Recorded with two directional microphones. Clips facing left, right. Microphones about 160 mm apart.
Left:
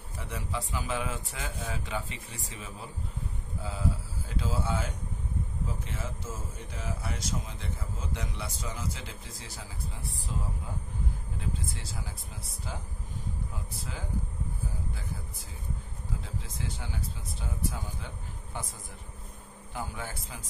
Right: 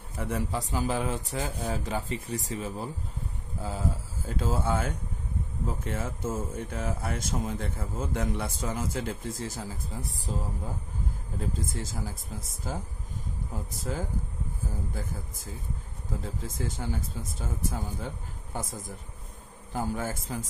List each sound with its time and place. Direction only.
0.2 s a man's voice: 45° right (ahead or behind)
11.3 s a man's voice: 45° right (ahead or behind)